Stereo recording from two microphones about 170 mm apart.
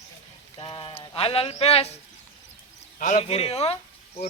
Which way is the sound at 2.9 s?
50° left (ahead or behind).